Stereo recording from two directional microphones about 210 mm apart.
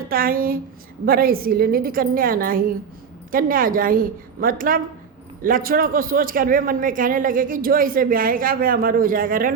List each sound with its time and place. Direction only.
0.1 s a woman's voice: 45° right (ahead or behind)